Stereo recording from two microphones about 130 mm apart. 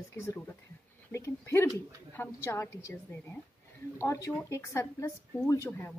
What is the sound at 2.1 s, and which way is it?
Speech, 20° left (ahead or behind).